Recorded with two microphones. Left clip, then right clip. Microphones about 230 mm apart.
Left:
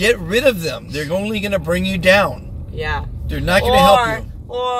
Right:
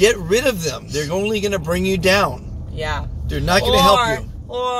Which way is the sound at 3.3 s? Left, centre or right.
Centre.